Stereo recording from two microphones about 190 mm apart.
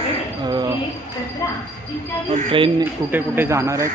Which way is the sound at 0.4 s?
20° right (ahead or behind).